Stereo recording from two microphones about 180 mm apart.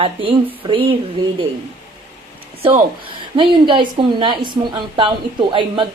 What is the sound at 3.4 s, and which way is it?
Speech, 25° right (ahead or behind).